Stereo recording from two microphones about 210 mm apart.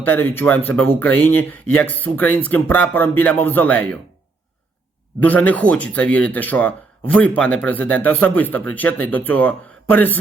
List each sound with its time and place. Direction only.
0.0 s speech: 10° left (ahead or behind)
5.2 s speech: 5° left (ahead or behind)